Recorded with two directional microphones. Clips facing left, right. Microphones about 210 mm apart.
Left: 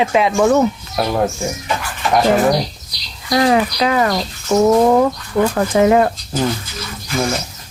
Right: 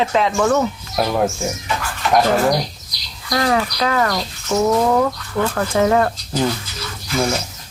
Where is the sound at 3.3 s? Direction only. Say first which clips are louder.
Left 4 dB; 15° left (ahead or behind).